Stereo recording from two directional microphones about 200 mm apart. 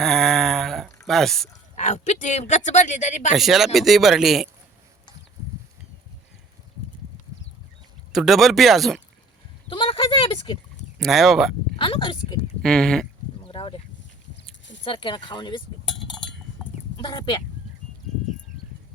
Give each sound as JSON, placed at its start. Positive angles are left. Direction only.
{"t": 0.0, "sound": "a sound", "side_deg": 0}
{"t": 1.7, "sound": "speech", "side_deg": 35}
{"t": 3.3, "sound": "speech", "side_deg": 0}
{"t": 8.1, "sound": "speech", "side_deg": 0}
{"t": 9.6, "sound": "speech", "side_deg": 25}
{"t": 10.9, "sound": "speech", "side_deg": 0}
{"t": 11.8, "sound": "speech", "side_deg": 25}
{"t": 12.6, "sound": "speech", "side_deg": 5}
{"t": 13.5, "sound": "speech", "side_deg": 25}
{"t": 14.8, "sound": "speech", "side_deg": 25}
{"t": 16.6, "sound": "chicken", "side_deg": 0}
{"t": 17.0, "sound": "speech", "side_deg": 20}